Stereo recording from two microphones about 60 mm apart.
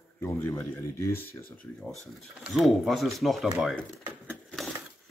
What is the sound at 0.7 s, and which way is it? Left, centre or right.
Speech, left.